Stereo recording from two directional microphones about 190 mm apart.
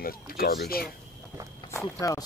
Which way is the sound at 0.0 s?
50° left (ahead or behind).